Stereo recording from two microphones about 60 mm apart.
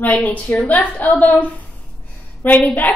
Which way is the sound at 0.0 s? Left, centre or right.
Left.